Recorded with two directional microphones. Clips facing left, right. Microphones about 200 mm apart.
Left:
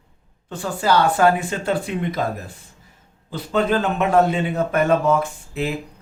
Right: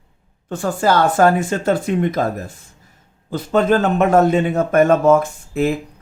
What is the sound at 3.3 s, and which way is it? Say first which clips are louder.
A man's voice: right 4 dB; 45° right (ahead or behind).